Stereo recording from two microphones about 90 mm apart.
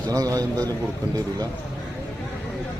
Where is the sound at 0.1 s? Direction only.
40° right (ahead or behind).